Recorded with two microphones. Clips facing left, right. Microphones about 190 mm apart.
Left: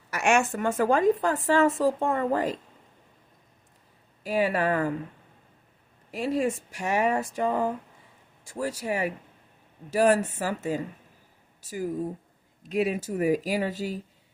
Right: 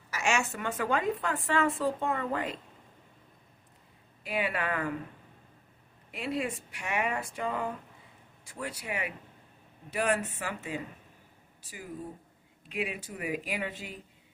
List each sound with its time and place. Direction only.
0.1 s a woman's voice: 60° left (ahead or behind); by 2.5 s 40° left (ahead or behind)
4.2 s speech: 40° left (ahead or behind)
6.1 s speech: 40° left (ahead or behind)